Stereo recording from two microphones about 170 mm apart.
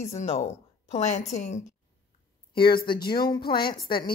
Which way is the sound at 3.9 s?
30° left (ahead or behind).